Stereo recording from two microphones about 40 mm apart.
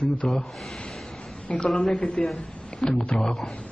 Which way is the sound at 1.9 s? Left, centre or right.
Left.